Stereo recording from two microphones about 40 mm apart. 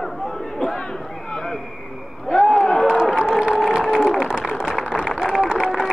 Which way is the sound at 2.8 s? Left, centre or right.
Centre.